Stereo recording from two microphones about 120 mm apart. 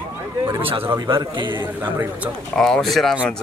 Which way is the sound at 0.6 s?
50° right (ahead or behind).